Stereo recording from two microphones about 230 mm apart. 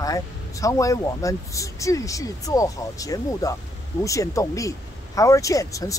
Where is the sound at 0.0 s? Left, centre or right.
Centre.